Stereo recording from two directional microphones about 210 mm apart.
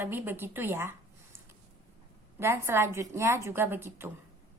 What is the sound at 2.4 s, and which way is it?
A woman's voice, 10° right (ahead or behind).